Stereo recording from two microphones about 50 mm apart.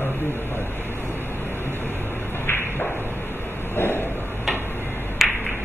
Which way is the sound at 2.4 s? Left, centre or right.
Left.